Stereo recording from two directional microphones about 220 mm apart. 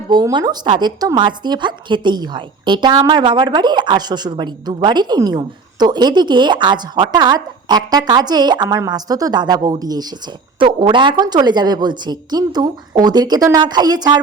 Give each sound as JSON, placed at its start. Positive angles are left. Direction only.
{"t": 0.1, "sound": "a woman's voice", "side_deg": -20}